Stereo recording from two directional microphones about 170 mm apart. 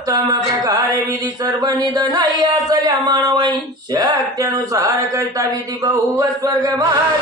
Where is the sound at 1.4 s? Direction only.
25° right (ahead or behind).